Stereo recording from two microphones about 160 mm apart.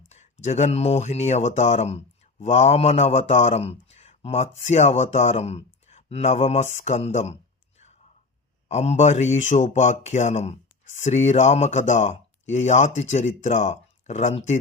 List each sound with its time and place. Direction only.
0.1 s a man's voice: 45° left (ahead or behind)
8.7 s a man's voice: 45° left (ahead or behind)